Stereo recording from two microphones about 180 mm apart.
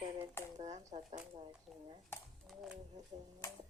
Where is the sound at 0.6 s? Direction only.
40° right (ahead or behind).